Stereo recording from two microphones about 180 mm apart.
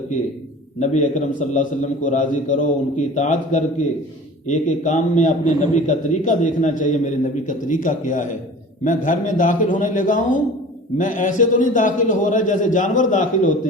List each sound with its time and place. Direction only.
0.8 s a man's voice: 45° left (ahead or behind)